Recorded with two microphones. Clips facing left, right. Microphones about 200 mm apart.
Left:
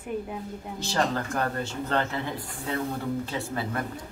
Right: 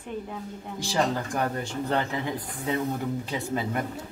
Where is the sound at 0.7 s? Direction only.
10° right (ahead or behind).